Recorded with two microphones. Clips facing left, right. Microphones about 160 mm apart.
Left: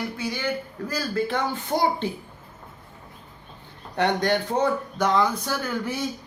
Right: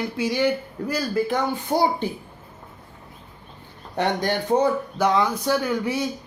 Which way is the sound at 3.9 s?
15° right (ahead or behind).